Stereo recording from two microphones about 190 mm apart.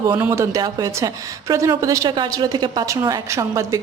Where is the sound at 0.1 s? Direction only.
15° right (ahead or behind).